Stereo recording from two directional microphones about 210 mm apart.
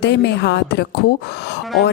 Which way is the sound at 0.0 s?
50° left (ahead or behind).